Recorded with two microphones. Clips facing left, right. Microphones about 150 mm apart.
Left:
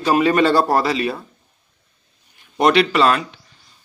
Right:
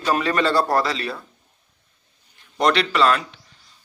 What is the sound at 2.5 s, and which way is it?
Speech, 15° left (ahead or behind).